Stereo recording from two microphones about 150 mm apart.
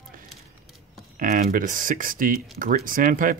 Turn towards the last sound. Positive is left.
turn(degrees=-65)  # may be behind; listen again after turning